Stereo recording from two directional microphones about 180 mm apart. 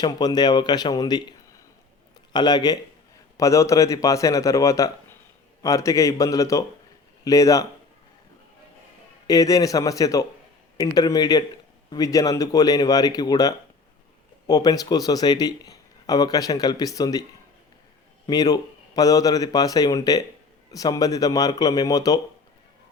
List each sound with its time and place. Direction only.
0.0 s speech: 20° left (ahead or behind)
2.3 s a man's voice: 25° left (ahead or behind)
9.2 s speech: 20° left (ahead or behind)
18.3 s speech: 20° left (ahead or behind)